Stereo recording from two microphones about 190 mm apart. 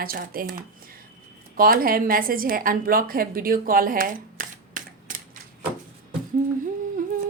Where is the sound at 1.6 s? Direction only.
50° right (ahead or behind).